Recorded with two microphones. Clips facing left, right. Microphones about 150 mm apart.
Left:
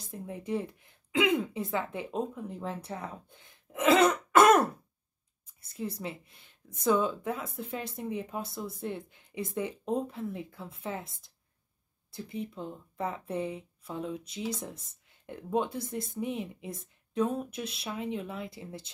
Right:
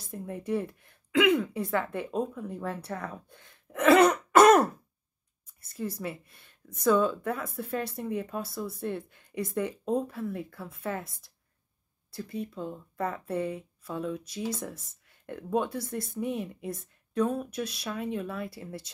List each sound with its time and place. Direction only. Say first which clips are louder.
0.0 s speech: right 3 dB; 20° left (ahead or behind)
4.0 s throat clearing: right 1 dB; centre (ahead or behind)
5.8 s speech: right 2 dB; 20° left (ahead or behind)